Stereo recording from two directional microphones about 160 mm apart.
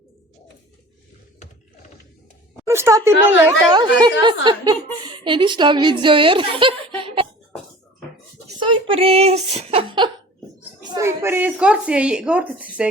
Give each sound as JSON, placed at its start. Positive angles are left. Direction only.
{"t": 2.6, "sound": "a woman's voice", "side_deg": -15}
{"t": 3.7, "sound": "a woman's voice", "side_deg": -25}
{"t": 8.5, "sound": "speech", "side_deg": -30}
{"t": 10.8, "sound": "speech", "side_deg": -20}